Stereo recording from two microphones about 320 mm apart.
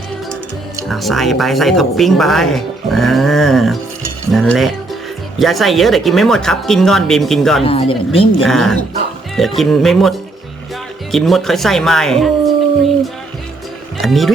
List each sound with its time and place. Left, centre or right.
0.8 s speech: centre
4.3 s cutlery: centre
5.4 s speech: centre
7.6 s speech: centre
8.4 s speech: centre
14.0 s speech: centre